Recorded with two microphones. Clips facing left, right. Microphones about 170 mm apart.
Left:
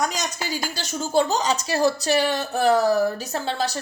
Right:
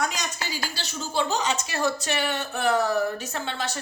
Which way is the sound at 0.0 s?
40° left (ahead or behind).